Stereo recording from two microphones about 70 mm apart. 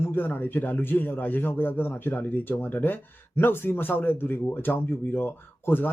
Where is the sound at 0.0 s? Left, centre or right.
Left.